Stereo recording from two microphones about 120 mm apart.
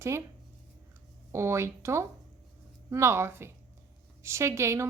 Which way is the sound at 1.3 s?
25° right (ahead or behind).